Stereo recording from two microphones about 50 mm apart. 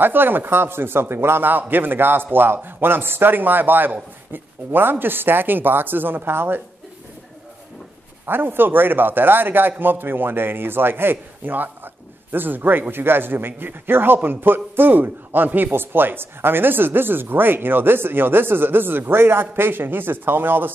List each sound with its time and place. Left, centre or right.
0.0 s a man's voice: right
8.3 s a man's voice: right